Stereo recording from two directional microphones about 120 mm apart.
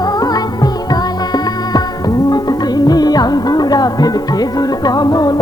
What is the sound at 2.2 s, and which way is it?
Music, 35° left (ahead or behind).